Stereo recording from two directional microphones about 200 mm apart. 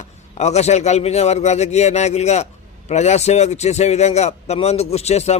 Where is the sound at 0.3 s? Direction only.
35° left (ahead or behind).